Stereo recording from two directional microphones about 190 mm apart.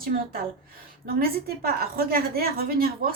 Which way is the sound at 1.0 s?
50° right (ahead or behind).